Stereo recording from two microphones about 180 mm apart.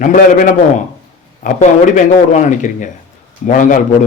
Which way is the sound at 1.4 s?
45° left (ahead or behind).